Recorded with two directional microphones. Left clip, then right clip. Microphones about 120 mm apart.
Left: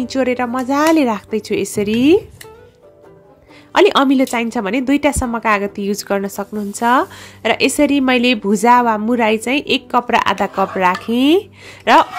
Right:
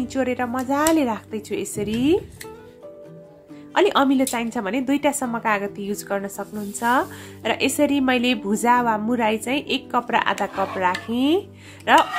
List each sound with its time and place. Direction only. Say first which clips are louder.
0.0 s speech: left 6 dB; 35° left (ahead or behind)
3.7 s a woman's voice: left 6 dB; 45° left (ahead or behind)